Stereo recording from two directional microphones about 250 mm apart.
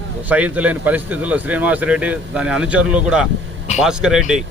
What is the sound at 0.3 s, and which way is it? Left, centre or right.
Speech, centre.